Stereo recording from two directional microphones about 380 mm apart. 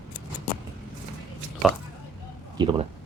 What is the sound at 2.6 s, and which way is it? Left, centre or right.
Speech, centre.